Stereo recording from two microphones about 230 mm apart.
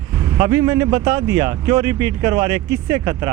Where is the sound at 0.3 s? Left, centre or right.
Centre.